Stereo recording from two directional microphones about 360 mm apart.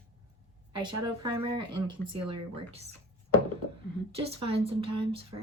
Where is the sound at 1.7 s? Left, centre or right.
Right.